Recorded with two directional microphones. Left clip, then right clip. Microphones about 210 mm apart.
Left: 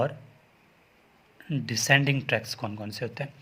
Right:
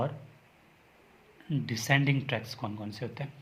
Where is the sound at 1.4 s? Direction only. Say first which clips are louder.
Left 6 dB; 30° left (ahead or behind).